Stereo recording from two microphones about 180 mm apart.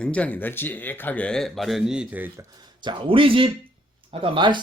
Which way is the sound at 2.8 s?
30° right (ahead or behind).